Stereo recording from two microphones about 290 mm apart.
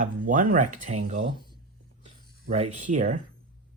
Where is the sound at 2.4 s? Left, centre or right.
Right.